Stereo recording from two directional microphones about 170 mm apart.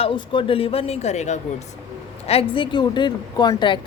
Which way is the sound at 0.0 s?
30° left (ahead or behind).